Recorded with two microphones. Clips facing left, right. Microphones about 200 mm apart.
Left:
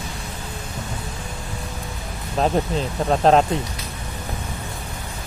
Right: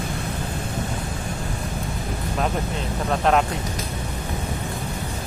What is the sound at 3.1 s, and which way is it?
Speech, 30° left (ahead or behind).